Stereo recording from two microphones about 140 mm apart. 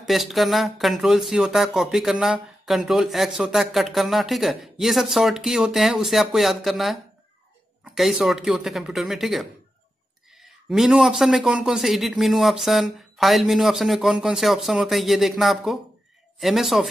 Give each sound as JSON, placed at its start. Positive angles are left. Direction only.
{"t": 0.0, "sound": "speech", "side_deg": 0}
{"t": 10.7, "sound": "speech", "side_deg": 0}